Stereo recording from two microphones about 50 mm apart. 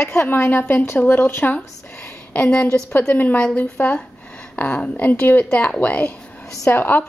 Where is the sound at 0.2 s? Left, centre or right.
Left.